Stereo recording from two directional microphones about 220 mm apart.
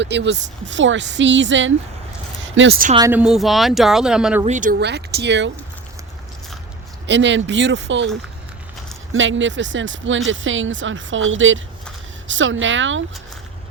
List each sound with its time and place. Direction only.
0.0 s speech: 50° right (ahead or behind)
2.4 s a sound: 60° right (ahead or behind)
3.1 s speech: 5° right (ahead or behind)
4.4 s speech: 35° right (ahead or behind); by 5.5 s 50° right (ahead or behind)
7.1 s speech: 55° right (ahead or behind)
9.1 s speech: 60° right (ahead or behind)